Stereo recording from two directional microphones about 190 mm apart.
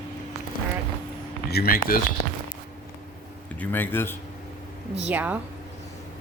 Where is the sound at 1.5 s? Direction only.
50° left (ahead or behind).